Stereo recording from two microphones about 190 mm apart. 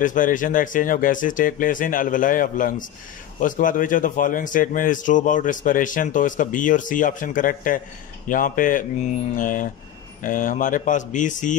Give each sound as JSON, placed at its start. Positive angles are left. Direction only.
{"t": 0.0, "sound": "a man's voice", "side_deg": 45}